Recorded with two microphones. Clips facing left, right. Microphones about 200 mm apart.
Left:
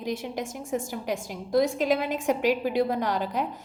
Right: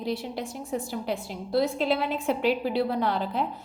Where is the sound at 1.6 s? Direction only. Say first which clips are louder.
Left 1 dB; 15° left (ahead or behind).